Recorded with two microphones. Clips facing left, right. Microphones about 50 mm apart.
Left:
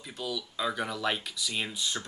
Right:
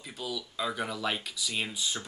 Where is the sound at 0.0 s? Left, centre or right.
Centre.